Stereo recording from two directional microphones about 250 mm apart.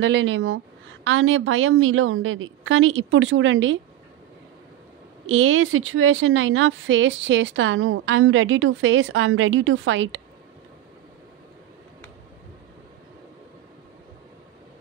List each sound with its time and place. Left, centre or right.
0.0 s speech: right
5.2 s speech: right